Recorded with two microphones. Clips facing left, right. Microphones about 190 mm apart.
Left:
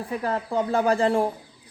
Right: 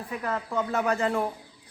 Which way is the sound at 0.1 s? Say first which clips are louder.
Left 4 dB; 35° left (ahead or behind).